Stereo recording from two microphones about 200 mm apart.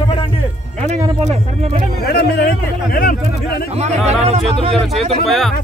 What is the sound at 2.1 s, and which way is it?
Speech, 50° left (ahead or behind).